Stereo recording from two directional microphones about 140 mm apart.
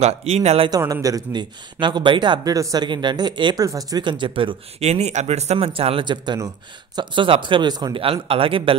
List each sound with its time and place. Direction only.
0.0 s a man's voice: 45° right (ahead or behind)
0.7 s a man's voice: 25° right (ahead or behind)